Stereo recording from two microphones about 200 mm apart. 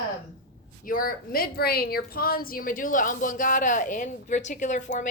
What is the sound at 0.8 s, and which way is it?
A woman's voice, 45° left (ahead or behind).